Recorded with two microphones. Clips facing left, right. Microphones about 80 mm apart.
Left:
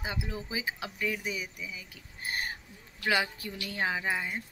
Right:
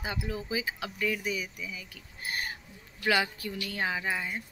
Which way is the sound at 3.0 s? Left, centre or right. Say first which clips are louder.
Right 2 dB; left.